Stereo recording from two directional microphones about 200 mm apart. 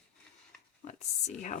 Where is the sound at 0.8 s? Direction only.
35° left (ahead or behind).